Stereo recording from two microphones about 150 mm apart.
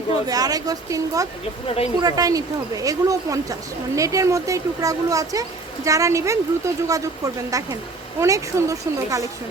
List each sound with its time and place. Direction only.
0.3 s a woman's voice: 25° right (ahead or behind)
1.6 s speech: 40° left (ahead or behind)
2.0 s a woman's voice: 25° right (ahead or behind)